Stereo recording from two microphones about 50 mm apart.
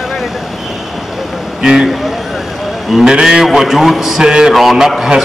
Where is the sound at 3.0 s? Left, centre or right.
Centre.